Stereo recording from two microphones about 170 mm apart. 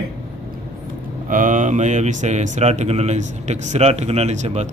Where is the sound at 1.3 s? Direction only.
50° right (ahead or behind).